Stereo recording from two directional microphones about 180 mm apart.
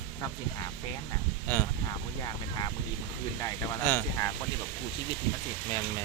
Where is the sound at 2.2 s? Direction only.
20° left (ahead or behind).